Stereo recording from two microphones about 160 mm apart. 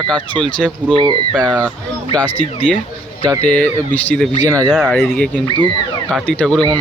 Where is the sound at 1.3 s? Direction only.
5° left (ahead or behind).